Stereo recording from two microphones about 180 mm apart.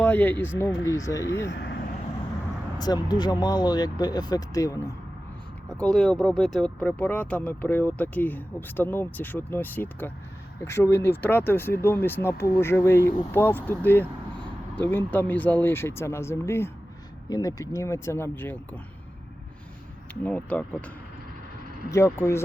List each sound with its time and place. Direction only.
0.0 s speech: 10° left (ahead or behind)
1.5 s speech: 70° left (ahead or behind)
2.7 s speech: 20° left (ahead or behind)
5.7 s speech: 5° left (ahead or behind)
20.2 s speech: 10° left (ahead or behind)